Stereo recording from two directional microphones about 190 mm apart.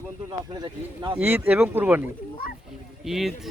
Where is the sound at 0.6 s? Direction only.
25° right (ahead or behind).